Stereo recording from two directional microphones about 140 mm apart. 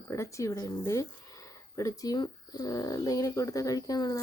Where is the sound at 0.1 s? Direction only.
20° left (ahead or behind).